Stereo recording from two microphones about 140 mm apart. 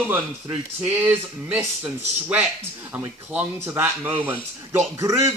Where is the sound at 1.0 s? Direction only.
10° right (ahead or behind).